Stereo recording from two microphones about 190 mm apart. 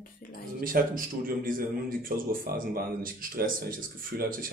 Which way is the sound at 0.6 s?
50° right (ahead or behind).